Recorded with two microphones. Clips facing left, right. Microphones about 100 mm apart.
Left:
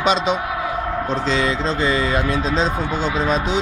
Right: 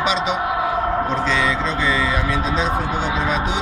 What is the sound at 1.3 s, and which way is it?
Mantra, 35° left (ahead or behind).